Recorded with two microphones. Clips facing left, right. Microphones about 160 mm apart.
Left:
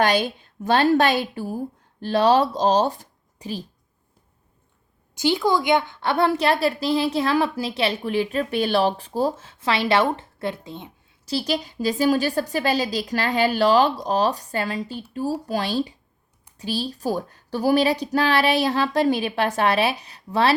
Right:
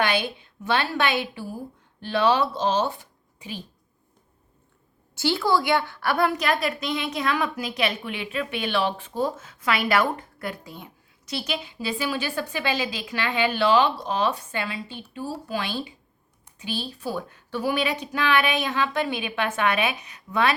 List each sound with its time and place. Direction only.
0.0 s a woman's voice: 40° left (ahead or behind)
5.1 s a woman's voice: 15° left (ahead or behind)
11.3 s a woman's voice: 35° left (ahead or behind)